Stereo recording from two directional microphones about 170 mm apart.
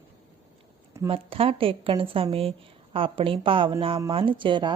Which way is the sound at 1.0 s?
35° right (ahead or behind).